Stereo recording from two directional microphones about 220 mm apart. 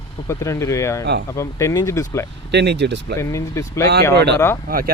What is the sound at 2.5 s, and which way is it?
Speech, 50° right (ahead or behind).